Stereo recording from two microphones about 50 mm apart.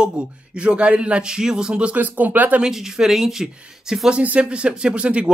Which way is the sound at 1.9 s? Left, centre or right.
Right.